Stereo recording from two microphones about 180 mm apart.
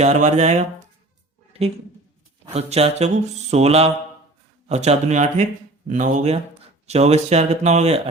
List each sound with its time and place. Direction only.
0.0 s speech: 40° right (ahead or behind)
2.5 s speech: 35° right (ahead or behind)